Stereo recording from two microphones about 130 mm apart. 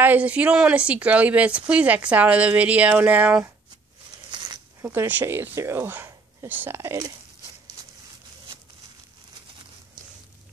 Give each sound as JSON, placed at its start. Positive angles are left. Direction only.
{"t": 0.0, "sound": "a woman's voice", "side_deg": -10}
{"t": 4.8, "sound": "a woman's voice", "side_deg": -15}